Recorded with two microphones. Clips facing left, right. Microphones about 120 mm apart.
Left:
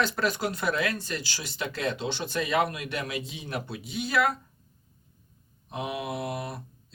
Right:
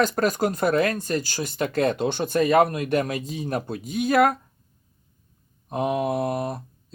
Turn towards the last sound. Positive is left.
turn(degrees=-45)  # may be behind; listen again after turning